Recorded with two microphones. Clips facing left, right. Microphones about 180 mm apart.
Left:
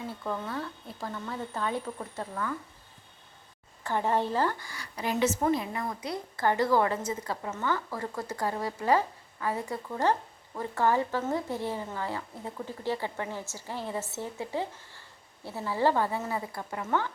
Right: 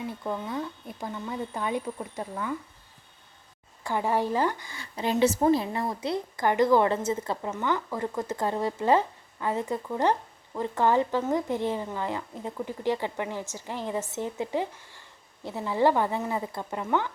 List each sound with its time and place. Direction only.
0.3 s speech: 15° right (ahead or behind)
3.8 s a woman's voice: 10° right (ahead or behind); by 6.1 s 30° right (ahead or behind)
6.3 s a woman's voice: 15° right (ahead or behind)